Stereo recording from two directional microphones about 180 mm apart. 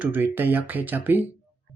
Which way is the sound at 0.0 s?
10° right (ahead or behind).